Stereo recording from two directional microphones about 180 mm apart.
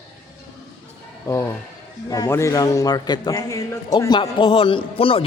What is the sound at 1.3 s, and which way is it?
A man's voice, 20° left (ahead or behind).